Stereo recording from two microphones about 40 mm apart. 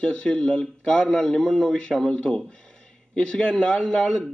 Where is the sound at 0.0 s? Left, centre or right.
Left.